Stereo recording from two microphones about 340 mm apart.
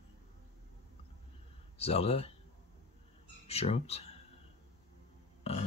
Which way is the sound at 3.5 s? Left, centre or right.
Centre.